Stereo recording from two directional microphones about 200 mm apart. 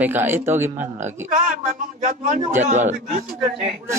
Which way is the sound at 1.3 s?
40° right (ahead or behind).